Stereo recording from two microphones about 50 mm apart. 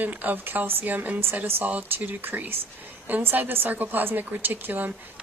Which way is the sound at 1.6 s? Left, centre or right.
Right.